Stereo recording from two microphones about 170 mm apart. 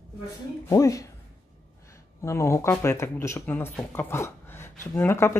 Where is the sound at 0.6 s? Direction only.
20° left (ahead or behind).